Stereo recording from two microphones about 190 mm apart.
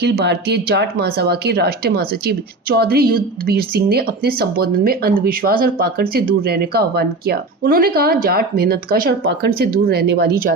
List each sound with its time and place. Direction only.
0.0 s speech: 60° right (ahead or behind)